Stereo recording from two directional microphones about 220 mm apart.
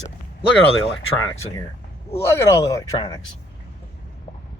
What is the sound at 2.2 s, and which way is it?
Speech, 15° left (ahead or behind).